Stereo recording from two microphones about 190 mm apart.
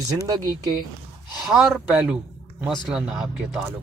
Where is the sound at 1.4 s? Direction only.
5° right (ahead or behind).